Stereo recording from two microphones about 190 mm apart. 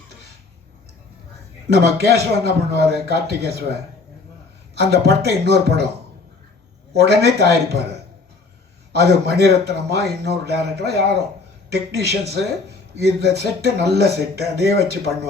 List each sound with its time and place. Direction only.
1.8 s speech: 60° right (ahead or behind)
6.9 s speech: 60° right (ahead or behind)
8.9 s speech: 60° right (ahead or behind)